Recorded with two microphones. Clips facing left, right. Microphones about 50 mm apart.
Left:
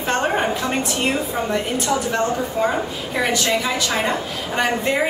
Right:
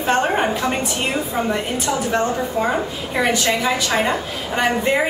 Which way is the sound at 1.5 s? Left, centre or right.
Centre.